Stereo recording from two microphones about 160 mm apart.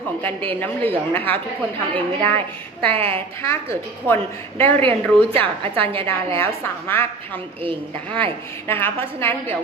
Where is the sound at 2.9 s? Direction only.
35° right (ahead or behind).